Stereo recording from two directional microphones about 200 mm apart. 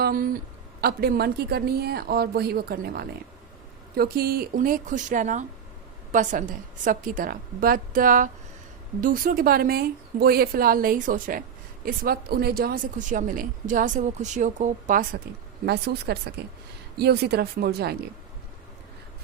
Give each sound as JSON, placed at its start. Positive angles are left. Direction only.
{"t": 0.0, "sound": "a woman's voice", "side_deg": -45}
{"t": 15.6, "sound": "speech", "side_deg": -55}